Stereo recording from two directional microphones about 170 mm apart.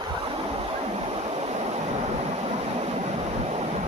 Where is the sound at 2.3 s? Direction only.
40° right (ahead or behind).